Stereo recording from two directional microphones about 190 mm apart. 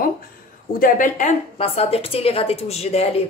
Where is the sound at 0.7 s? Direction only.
45° left (ahead or behind).